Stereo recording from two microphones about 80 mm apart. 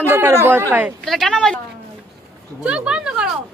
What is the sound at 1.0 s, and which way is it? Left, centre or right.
Speech, centre.